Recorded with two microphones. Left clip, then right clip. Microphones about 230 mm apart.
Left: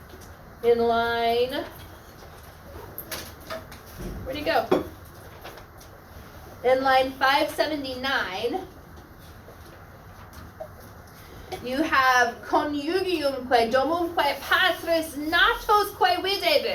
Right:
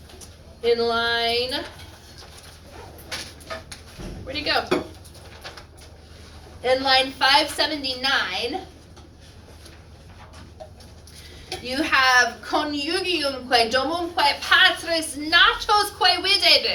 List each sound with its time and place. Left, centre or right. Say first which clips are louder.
0.6 s a woman's voice: even; right
4.3 s a woman's voice: even; right
6.6 s a woman's voice: right 1 dB; right
11.4 s a woman's voice: right 2 dB; right